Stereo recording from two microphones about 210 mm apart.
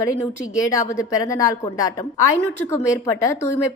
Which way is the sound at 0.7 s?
15° left (ahead or behind).